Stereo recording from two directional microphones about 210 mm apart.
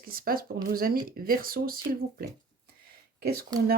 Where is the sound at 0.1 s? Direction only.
45° right (ahead or behind).